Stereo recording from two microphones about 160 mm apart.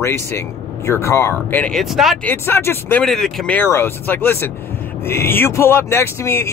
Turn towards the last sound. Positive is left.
turn(degrees=15)  # may be behind; listen again after turning